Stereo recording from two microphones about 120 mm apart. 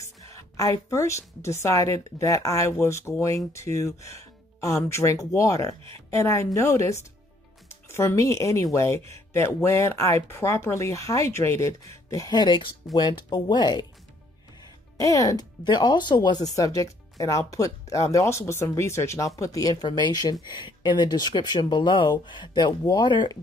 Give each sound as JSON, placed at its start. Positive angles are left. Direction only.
{"t": 0.0, "sound": "speech", "side_deg": 25}
{"t": 12.1, "sound": "speech", "side_deg": 35}
{"t": 15.0, "sound": "speech", "side_deg": 30}